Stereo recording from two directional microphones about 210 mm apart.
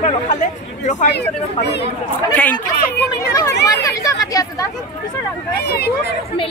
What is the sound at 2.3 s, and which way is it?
Speech, 5° left (ahead or behind).